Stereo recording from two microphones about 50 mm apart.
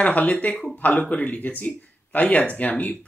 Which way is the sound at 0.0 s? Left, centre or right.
Left.